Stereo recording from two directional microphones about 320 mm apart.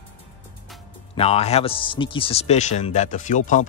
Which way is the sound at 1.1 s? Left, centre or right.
Centre.